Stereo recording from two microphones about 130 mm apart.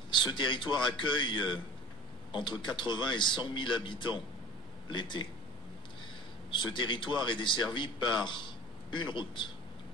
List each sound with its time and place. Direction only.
0.1 s speech: 40° left (ahead or behind)
6.5 s a man's voice: 35° left (ahead or behind)